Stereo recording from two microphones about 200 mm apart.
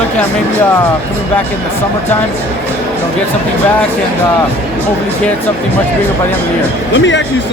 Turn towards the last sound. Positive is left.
turn(degrees=65)  # may be behind; listen again after turning